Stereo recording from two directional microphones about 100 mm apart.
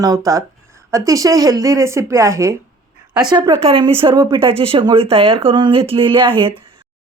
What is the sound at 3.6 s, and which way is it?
Speech, 60° right (ahead or behind).